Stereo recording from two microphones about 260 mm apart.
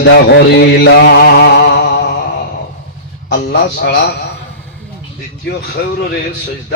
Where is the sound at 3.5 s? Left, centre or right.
Left.